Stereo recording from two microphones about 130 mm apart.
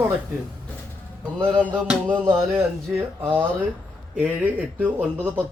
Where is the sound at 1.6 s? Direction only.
10° right (ahead or behind).